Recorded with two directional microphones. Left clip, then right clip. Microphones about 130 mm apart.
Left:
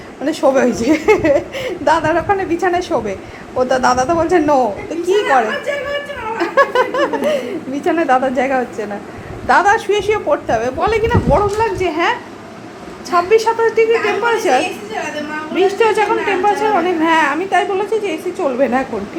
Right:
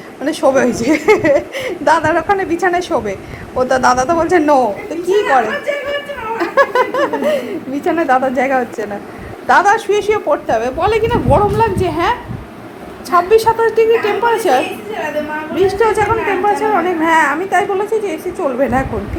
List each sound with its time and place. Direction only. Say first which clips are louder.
0.3 s a woman's voice: right 1 dB; 5° left (ahead or behind)
6.4 s a woman's voice: right 1 dB; centre (ahead or behind); by 17.6 s 25° left (ahead or behind)
17.6 s a woman's voice: right 1 dB; 10° left (ahead or behind)